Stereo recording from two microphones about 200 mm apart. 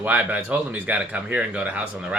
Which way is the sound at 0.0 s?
5° right (ahead or behind).